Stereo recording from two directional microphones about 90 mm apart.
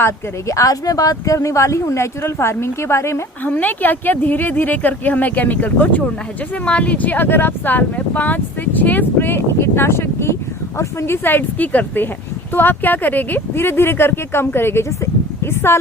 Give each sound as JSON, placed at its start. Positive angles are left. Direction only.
{"t": 0.0, "sound": "speech", "side_deg": 35}
{"t": 3.5, "sound": "speech", "side_deg": 20}